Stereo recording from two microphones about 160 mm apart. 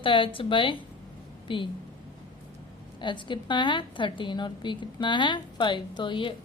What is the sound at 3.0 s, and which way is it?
Speech, 30° left (ahead or behind).